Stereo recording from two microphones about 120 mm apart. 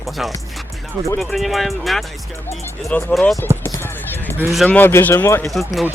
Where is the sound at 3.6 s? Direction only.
20° left (ahead or behind).